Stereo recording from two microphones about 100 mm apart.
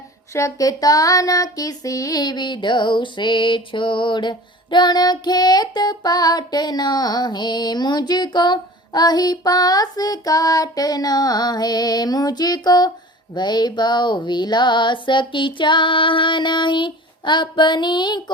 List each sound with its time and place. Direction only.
0.3 s child singing: 30° left (ahead or behind); by 18.2 s 50° left (ahead or behind)